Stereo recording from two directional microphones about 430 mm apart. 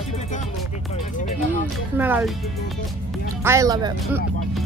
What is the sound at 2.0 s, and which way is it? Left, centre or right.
Speech, centre.